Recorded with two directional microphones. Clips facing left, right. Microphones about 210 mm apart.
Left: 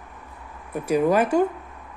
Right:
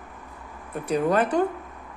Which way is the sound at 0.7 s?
10° left (ahead or behind).